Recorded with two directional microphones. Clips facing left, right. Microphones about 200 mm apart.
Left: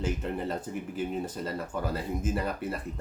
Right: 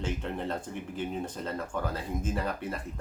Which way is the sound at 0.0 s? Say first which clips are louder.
Left 2 dB; 5° left (ahead or behind).